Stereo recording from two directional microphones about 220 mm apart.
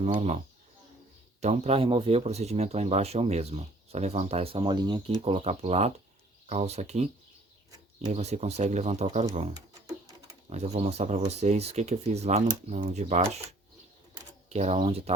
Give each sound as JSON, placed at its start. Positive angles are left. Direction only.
{"t": 0.0, "sound": "speech", "side_deg": -30}
{"t": 1.4, "sound": "speech", "side_deg": -30}
{"t": 8.1, "sound": "speech", "side_deg": -30}
{"t": 9.8, "sound": "a sound", "side_deg": -15}
{"t": 10.5, "sound": "speech", "side_deg": -30}
{"t": 14.5, "sound": "speech", "side_deg": -30}